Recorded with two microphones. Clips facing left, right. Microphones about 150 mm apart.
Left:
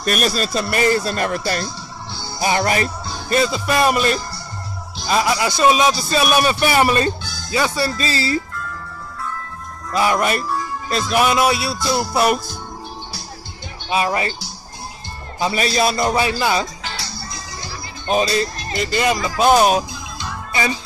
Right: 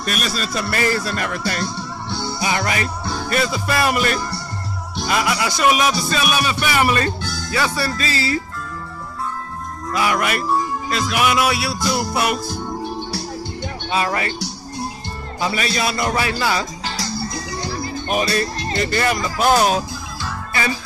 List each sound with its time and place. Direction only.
0.0 s speech: 45° left (ahead or behind)
0.5 s music: 25° left (ahead or behind)
1.8 s music: 70° right (ahead or behind)
2.4 s a man's voice: 35° left (ahead or behind)
3.3 s music: 25° left (ahead or behind)
6.2 s a man's voice: 40° left (ahead or behind)
7.5 s music: 25° left (ahead or behind)
9.9 s music: 30° left (ahead or behind)
13.8 s speech: 20° left (ahead or behind)
15.4 s a man's voice: 30° left (ahead or behind)
16.1 s music: 20° left (ahead or behind)
16.8 s music: 40° right (ahead or behind)
18.0 s music: 25° left (ahead or behind)
18.8 s speech: 15° left (ahead or behind)